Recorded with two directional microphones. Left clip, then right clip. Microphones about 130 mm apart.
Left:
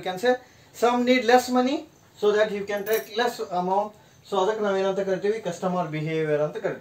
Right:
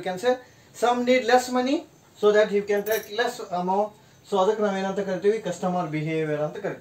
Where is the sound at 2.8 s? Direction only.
30° left (ahead or behind).